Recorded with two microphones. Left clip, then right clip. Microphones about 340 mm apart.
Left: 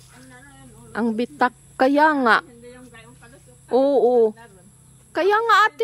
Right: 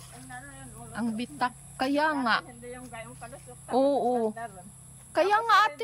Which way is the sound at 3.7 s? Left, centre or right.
Centre.